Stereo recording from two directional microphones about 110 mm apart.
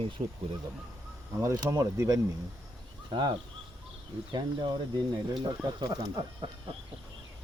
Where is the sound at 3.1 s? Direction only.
45° right (ahead or behind).